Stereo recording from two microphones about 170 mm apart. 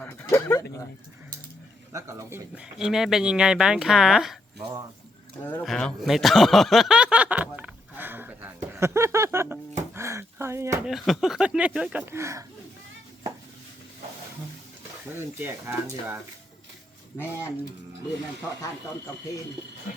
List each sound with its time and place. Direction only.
0.0 s dog: 15° left (ahead or behind)
1.9 s speech: 15° right (ahead or behind)
2.6 s speech: 5° right (ahead or behind)
5.6 s speech: centre (ahead or behind); by 10.8 s 15° right (ahead or behind)
10.8 s speech: centre (ahead or behind); by 12.5 s 15° right (ahead or behind)
15.1 s speech: 15° right (ahead or behind)